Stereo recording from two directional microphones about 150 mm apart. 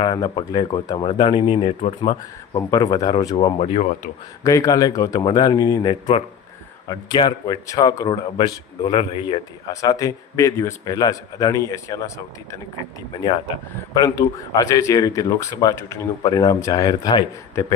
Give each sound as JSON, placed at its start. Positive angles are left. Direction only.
{"t": 0.0, "sound": "a man's voice", "side_deg": 25}
{"t": 2.6, "sound": "a man's voice", "side_deg": 25}
{"t": 3.3, "sound": "speech", "side_deg": 40}
{"t": 4.4, "sound": "a man's voice", "side_deg": 20}
{"t": 9.8, "sound": "a man's voice", "side_deg": 25}
{"t": 13.9, "sound": "a man's voice", "side_deg": 25}